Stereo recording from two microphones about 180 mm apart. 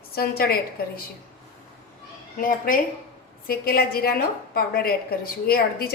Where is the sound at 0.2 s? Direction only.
60° left (ahead or behind).